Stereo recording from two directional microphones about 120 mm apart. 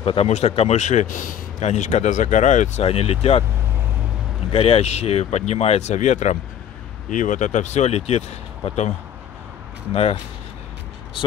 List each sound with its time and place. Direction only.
0.0 s speech: 55° left (ahead or behind)
4.5 s speech: 50° left (ahead or behind); by 8.9 s 70° left (ahead or behind)
9.9 s speech: 55° left (ahead or behind)